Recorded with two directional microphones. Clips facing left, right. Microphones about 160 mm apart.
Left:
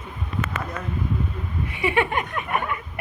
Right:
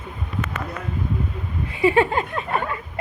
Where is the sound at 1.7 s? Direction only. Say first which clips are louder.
Right 5 dB; 30° right (ahead or behind).